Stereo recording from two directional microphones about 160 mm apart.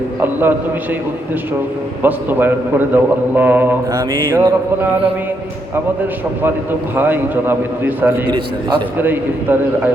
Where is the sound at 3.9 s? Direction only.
25° right (ahead or behind).